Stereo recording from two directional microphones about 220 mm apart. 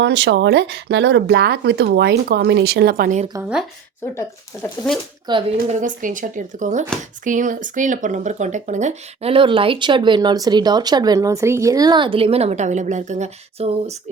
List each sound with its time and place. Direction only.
0.0 s speech: 55° right (ahead or behind); by 3.2 s 35° right (ahead or behind)
4.1 s speech: 10° left (ahead or behind)
5.5 s speech: 35° right (ahead or behind)